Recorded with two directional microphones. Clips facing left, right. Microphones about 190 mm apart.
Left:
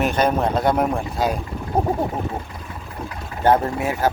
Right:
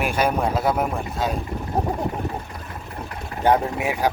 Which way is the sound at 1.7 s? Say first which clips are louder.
Left 3 dB; 20° left (ahead or behind).